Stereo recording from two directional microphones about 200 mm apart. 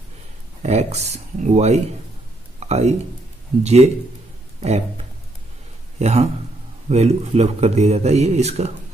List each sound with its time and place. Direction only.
0.6 s a man's voice: 35° right (ahead or behind)